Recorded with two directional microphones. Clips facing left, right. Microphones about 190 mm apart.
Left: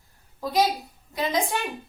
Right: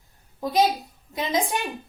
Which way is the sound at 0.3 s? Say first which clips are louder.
Right 2 dB; 20° right (ahead or behind).